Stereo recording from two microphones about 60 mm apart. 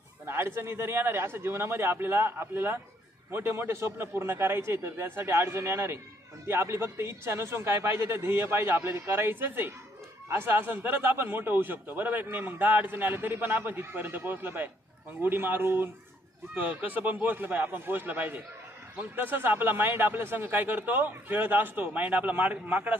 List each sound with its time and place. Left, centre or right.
0.3 s a man's voice: right